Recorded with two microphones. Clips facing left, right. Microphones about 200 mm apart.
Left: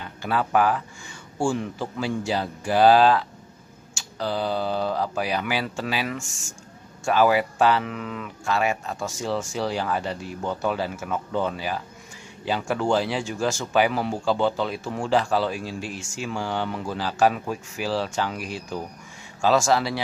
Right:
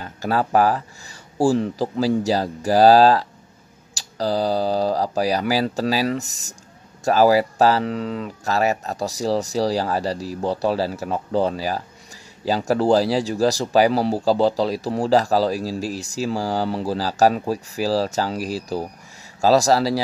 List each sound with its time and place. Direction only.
0.0 s speech: 40° right (ahead or behind)